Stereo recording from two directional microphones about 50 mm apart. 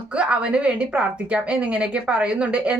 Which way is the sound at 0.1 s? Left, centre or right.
Right.